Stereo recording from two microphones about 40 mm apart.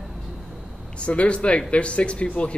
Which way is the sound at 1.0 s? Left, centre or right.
Left.